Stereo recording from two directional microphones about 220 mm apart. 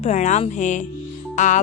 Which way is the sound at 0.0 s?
35° left (ahead or behind).